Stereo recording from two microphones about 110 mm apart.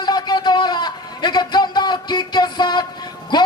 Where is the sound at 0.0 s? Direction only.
40° left (ahead or behind).